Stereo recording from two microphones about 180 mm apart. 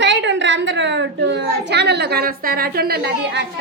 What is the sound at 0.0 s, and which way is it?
A child's voice, 80° right.